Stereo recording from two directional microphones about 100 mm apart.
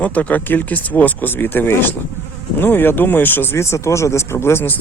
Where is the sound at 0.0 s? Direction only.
15° left (ahead or behind).